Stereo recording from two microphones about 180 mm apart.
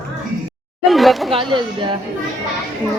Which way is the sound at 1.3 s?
30° right (ahead or behind).